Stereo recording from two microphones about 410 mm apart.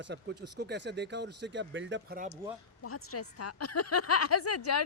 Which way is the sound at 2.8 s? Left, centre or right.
Left.